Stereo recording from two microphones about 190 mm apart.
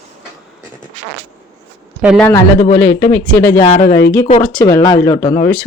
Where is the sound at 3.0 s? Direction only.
15° left (ahead or behind).